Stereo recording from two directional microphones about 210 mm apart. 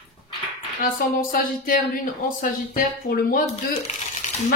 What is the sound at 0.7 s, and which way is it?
Speech, 40° left (ahead or behind).